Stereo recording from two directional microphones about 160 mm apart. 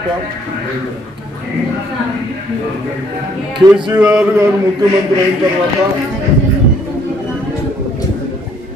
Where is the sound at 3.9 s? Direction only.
10° right (ahead or behind).